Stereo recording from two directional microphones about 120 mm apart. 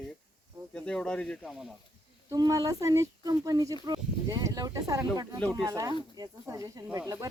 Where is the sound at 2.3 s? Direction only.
30° right (ahead or behind).